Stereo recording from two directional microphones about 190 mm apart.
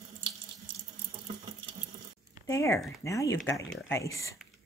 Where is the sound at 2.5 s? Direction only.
15° left (ahead or behind).